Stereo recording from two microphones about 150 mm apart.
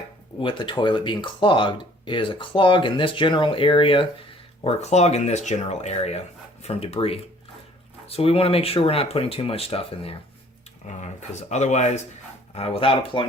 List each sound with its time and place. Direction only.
0.3 s speech: 35° left (ahead or behind)
4.6 s speech: 45° left (ahead or behind)
10.8 s speech: 50° left (ahead or behind); by 13.2 s 35° left (ahead or behind)